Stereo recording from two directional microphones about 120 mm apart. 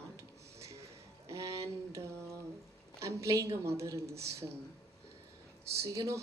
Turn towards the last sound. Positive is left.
turn(degrees=-25)  # may be behind; listen again after turning